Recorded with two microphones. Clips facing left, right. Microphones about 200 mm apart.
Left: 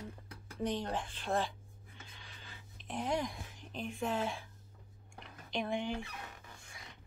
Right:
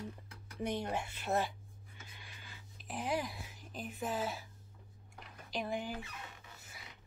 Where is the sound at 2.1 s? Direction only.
10° right (ahead or behind).